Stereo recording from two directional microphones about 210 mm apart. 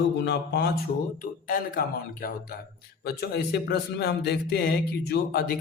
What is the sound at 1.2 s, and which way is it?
Speech, 40° left (ahead or behind).